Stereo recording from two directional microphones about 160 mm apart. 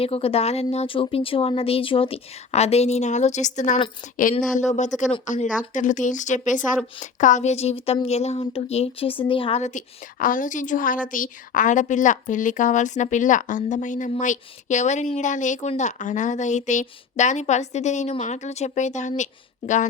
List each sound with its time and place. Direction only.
0.0 s speech: 35° left (ahead or behind)
5.2 s a woman's voice: 50° left (ahead or behind)